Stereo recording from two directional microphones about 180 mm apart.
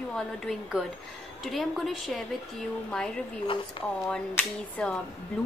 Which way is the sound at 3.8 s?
30° left (ahead or behind).